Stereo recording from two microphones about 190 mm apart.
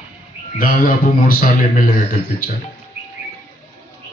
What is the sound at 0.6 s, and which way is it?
A man's voice, 45° left (ahead or behind).